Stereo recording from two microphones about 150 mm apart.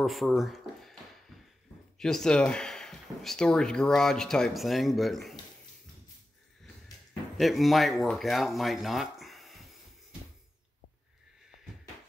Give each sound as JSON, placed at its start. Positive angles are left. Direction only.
{"t": 0.0, "sound": "a sound", "side_deg": 0}
{"t": 2.0, "sound": "speech", "side_deg": 5}
{"t": 7.3, "sound": "speech", "side_deg": 0}